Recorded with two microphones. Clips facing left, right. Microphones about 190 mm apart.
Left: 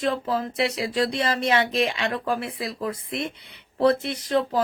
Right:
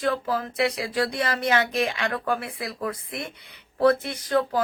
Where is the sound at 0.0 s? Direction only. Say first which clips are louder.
Left 1 dB; 25° left (ahead or behind).